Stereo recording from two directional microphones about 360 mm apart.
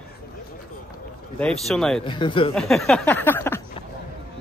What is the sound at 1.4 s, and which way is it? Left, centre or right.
Speech, centre.